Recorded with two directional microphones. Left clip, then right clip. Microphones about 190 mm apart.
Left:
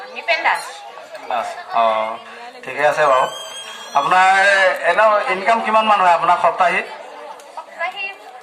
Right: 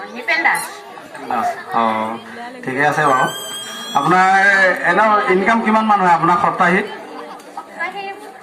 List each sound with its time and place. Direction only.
0.3 s a man's voice: 35° left (ahead or behind)